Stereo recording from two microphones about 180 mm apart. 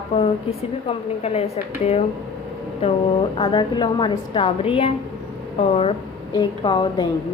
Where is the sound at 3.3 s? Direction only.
25° left (ahead or behind).